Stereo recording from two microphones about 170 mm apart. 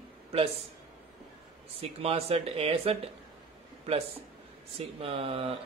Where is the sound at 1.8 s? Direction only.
35° right (ahead or behind).